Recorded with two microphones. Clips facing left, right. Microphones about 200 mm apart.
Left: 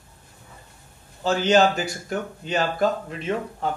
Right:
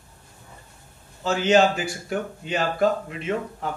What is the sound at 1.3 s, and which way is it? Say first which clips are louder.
Speech: even; 35° left (ahead or behind).